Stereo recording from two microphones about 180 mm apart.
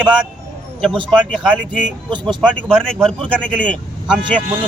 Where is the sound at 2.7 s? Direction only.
5° left (ahead or behind).